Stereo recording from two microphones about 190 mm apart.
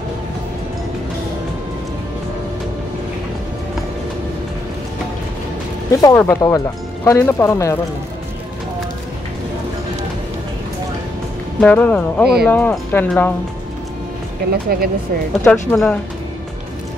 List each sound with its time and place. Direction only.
5.9 s speech: 20° left (ahead or behind)
11.6 s speech: 5° left (ahead or behind)
14.5 s speech: 50° right (ahead or behind)
15.4 s speech: 5° left (ahead or behind)